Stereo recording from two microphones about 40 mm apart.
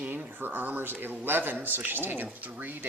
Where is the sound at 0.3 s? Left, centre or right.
Right.